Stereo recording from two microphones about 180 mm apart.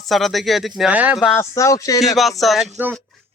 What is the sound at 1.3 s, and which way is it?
Speech, 15° left (ahead or behind).